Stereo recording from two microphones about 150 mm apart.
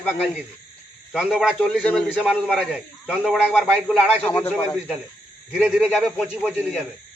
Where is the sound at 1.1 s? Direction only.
5° right (ahead or behind).